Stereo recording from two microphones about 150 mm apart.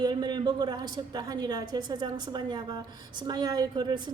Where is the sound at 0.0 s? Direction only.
30° right (ahead or behind).